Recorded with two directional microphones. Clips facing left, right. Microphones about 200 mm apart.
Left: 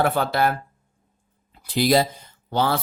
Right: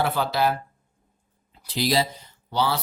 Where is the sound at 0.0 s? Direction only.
55° left (ahead or behind).